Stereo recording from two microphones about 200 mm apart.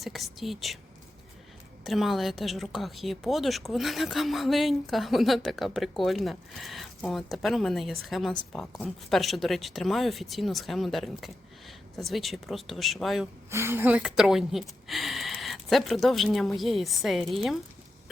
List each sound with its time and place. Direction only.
0.0 s a woman's voice: centre (ahead or behind)
1.8 s a woman's voice: centre (ahead or behind)
13.5 s a woman's voice: 10° right (ahead or behind)